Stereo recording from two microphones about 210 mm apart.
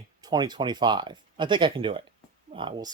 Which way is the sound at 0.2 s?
20° right (ahead or behind).